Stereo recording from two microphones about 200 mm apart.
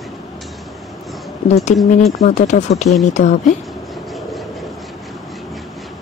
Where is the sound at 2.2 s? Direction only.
35° left (ahead or behind).